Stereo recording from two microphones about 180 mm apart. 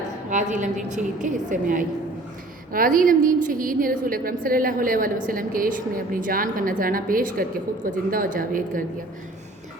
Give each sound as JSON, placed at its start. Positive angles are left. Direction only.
{"t": 0.3, "sound": "a woman's voice", "side_deg": -45}